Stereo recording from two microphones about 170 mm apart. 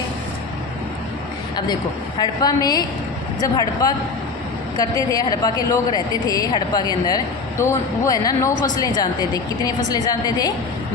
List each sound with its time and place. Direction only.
2.1 s a woman's voice: 25° left (ahead or behind)